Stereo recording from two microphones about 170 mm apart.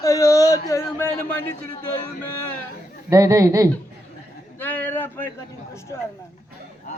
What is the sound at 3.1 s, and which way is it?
Speech, 20° right (ahead or behind).